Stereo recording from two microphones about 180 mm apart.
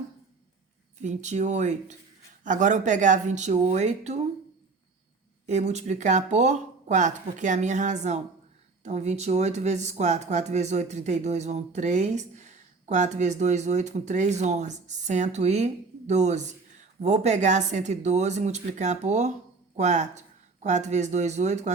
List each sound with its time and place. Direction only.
1.0 s speech: 40° right (ahead or behind)
5.5 s speech: 40° right (ahead or behind)